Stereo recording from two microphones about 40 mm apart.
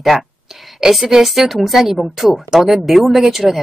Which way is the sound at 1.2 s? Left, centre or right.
Centre.